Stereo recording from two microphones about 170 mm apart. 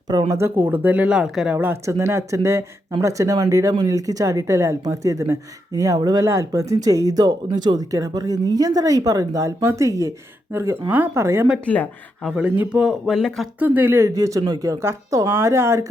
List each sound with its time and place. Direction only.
0.1 s speech: 20° right (ahead or behind)
11.6 s speech: 10° left (ahead or behind)
12.4 s speech: 5° right (ahead or behind)
13.6 s speech: 10° right (ahead or behind)